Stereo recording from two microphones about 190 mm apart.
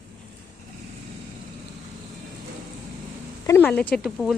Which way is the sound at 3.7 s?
5° left (ahead or behind).